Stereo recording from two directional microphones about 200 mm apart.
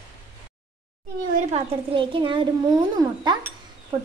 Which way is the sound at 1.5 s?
25° right (ahead or behind).